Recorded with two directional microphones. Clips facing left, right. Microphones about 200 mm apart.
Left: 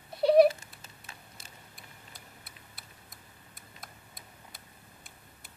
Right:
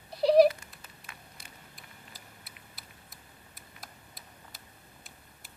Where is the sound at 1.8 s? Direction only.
Centre (ahead or behind).